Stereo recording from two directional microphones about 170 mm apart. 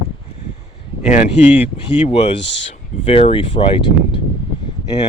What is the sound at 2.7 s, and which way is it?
Speech, 35° left (ahead or behind).